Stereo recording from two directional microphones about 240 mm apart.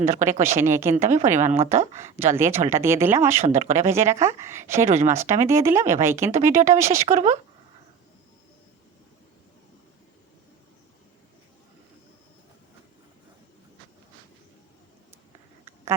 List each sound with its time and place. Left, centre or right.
0.0 s a woman's voice: right
0.4 s speech: centre
0.9 s a woman's voice: right
2.3 s speech: centre
3.3 s a woman's voice: right
3.8 s speech: centre
7.0 s a woman's voice: right